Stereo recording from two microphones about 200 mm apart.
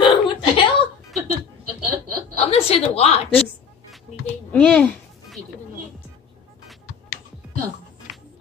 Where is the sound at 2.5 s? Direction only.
30° left (ahead or behind).